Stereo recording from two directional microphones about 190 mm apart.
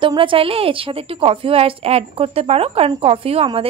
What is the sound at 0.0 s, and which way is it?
A woman's voice, 25° right (ahead or behind).